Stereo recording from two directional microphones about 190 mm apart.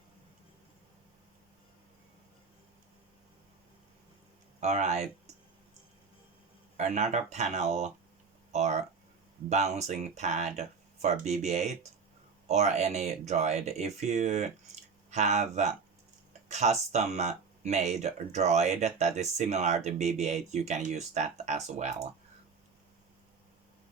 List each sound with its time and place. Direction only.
4.6 s speech: 35° right (ahead or behind)
6.7 s speech: 40° right (ahead or behind)